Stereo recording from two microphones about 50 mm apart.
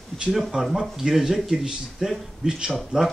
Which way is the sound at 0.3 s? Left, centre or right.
Centre.